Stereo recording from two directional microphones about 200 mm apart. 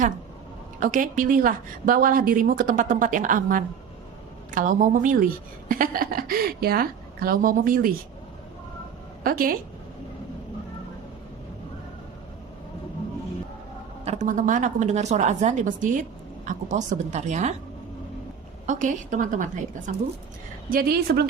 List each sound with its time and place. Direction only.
0.8 s a woman's voice: 40° right (ahead or behind)
9.2 s a woman's voice: 45° right (ahead or behind)
14.0 s speech: 35° right (ahead or behind)
18.6 s speech: 40° right (ahead or behind)
20.7 s a woman's voice: 45° right (ahead or behind)